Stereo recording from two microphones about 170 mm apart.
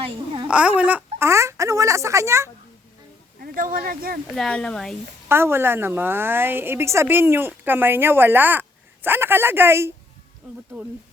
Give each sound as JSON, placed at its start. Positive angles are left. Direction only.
{"t": 0.4, "sound": "a woman's voice", "side_deg": -5}
{"t": 3.4, "sound": "speech", "side_deg": -55}
{"t": 4.4, "sound": "speech", "side_deg": 5}
{"t": 5.3, "sound": "a woman's voice", "side_deg": -15}